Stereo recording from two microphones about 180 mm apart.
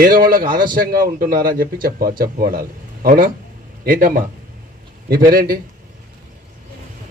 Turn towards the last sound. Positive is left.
turn(degrees=-55)  # may be behind; listen again after turning